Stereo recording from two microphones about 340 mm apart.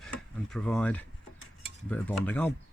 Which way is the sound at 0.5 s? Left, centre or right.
Centre.